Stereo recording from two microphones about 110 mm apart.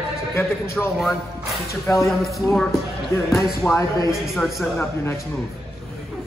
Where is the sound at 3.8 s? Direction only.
30° left (ahead or behind).